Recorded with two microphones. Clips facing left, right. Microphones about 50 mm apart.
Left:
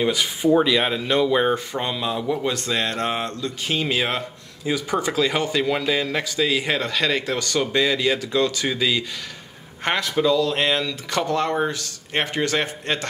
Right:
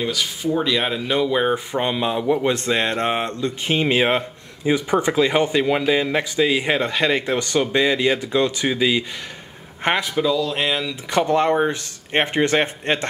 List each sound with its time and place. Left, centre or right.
0.1 s speech: left
0.7 s speech: centre
1.7 s speech: right
10.1 s speech: centre
11.1 s speech: right